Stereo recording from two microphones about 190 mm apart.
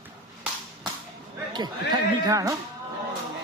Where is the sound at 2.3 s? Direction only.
15° right (ahead or behind).